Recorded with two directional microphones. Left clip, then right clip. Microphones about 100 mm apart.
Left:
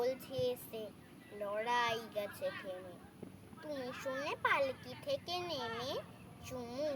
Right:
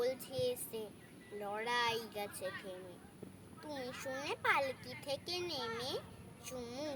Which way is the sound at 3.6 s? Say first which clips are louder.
Left 2 dB; 35° right (ahead or behind).